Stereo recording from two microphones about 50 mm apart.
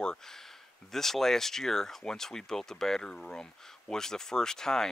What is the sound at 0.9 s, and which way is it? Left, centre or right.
Speech, centre.